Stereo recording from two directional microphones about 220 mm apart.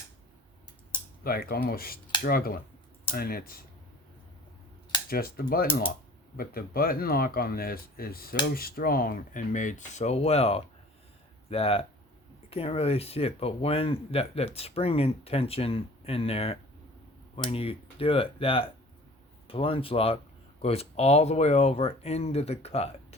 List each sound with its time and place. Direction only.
1.2 s speech: 40° left (ahead or behind)
5.0 s speech: 40° left (ahead or behind)